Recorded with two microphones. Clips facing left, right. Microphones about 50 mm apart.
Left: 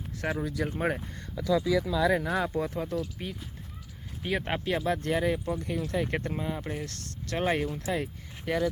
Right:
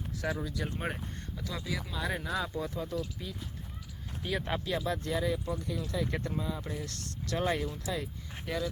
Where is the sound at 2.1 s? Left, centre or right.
Left.